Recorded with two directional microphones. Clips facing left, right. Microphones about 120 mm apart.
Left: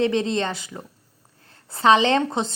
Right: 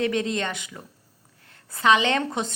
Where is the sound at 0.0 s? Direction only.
30° left (ahead or behind).